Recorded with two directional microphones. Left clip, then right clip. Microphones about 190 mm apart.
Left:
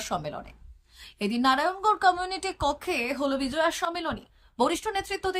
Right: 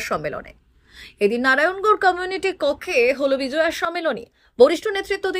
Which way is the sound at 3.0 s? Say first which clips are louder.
Right 9 dB; 50° left (ahead or behind).